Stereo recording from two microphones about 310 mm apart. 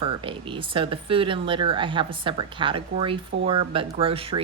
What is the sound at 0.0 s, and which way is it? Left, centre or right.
A woman's voice, centre.